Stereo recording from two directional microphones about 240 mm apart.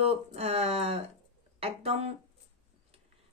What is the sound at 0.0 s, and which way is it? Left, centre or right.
Speech, right.